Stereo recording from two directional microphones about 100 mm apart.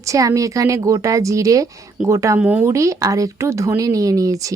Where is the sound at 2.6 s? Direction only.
30° right (ahead or behind).